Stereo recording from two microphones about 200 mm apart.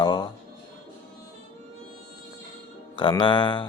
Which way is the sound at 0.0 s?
20° left (ahead or behind).